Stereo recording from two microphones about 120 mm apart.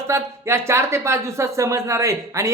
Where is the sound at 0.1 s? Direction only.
20° right (ahead or behind).